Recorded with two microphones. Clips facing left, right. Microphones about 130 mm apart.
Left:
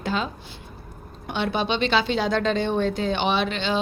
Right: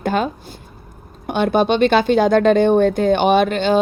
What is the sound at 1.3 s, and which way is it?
Speech, 50° right (ahead or behind).